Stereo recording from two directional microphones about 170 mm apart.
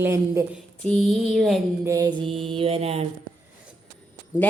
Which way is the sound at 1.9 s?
20° right (ahead or behind).